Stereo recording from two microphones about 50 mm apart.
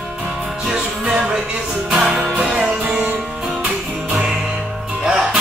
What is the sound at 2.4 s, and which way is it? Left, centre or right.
Music, right.